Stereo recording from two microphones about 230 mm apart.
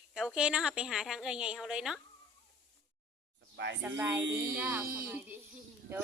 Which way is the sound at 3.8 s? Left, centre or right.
Centre.